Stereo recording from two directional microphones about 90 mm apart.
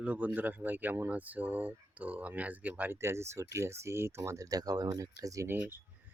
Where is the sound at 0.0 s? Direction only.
15° right (ahead or behind).